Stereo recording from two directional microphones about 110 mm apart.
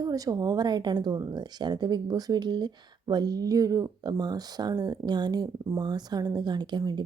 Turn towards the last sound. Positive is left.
turn(degrees=-40)  # may be behind; listen again after turning